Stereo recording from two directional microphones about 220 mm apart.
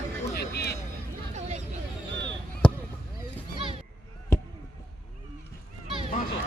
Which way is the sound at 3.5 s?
25° right (ahead or behind).